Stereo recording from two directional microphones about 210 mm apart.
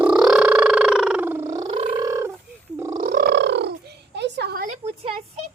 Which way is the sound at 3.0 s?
45° right (ahead or behind).